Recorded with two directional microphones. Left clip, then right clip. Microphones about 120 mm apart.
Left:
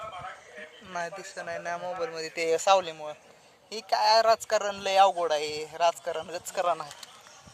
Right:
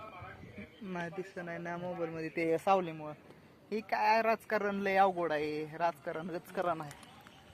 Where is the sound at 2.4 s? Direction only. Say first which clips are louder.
Left 7 dB; 10° left (ahead or behind).